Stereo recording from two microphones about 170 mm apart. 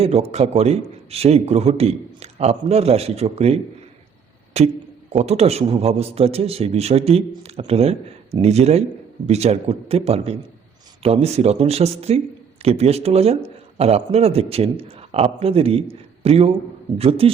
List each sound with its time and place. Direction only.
0.0 s speech: 40° right (ahead or behind)